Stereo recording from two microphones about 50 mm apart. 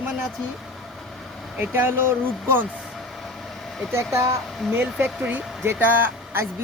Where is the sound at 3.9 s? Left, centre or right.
Right.